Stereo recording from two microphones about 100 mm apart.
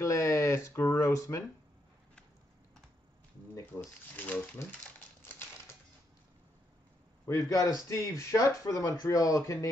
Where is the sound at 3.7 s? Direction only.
15° left (ahead or behind).